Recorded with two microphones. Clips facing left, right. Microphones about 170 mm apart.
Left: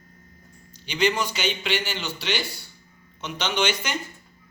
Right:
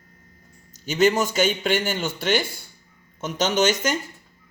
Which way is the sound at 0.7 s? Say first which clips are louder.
Right 5 dB; 45° right (ahead or behind).